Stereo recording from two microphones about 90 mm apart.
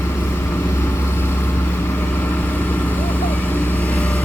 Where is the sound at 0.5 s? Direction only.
25° left (ahead or behind).